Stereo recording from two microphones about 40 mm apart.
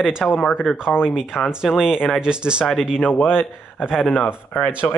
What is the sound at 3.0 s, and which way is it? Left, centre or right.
Speech, left.